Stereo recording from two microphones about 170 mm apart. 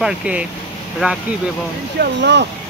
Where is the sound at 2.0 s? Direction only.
85° right.